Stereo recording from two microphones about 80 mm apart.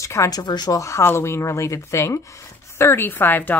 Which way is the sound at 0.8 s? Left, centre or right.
Left.